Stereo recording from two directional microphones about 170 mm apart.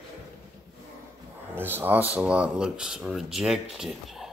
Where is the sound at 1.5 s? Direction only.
10° right (ahead or behind).